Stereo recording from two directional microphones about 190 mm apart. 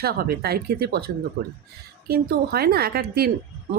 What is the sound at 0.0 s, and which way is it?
A woman's voice, 55° right (ahead or behind).